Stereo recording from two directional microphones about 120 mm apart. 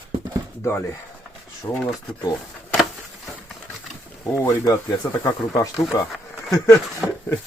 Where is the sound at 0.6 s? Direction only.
20° left (ahead or behind).